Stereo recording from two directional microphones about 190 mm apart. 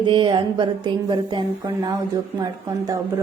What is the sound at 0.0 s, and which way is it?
A woman's voice, 25° right (ahead or behind).